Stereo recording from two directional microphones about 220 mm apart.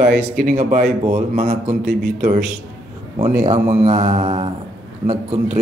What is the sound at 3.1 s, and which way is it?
Speech, 20° right (ahead or behind).